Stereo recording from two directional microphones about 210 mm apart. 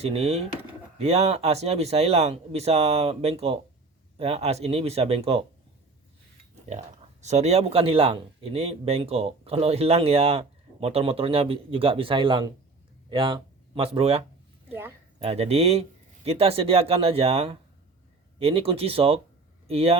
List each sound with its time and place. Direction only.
0.0 s speech: 30° right (ahead or behind)
6.7 s speech: 30° right (ahead or behind)
14.7 s speech: 10° right (ahead or behind)
15.2 s speech: 30° right (ahead or behind)